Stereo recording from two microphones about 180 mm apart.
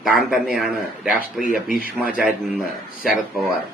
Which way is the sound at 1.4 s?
50° left (ahead or behind).